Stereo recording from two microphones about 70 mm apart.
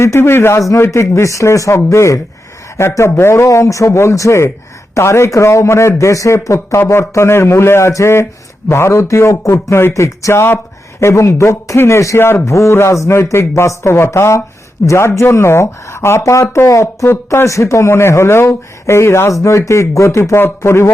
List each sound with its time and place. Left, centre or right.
0.0 s speech: left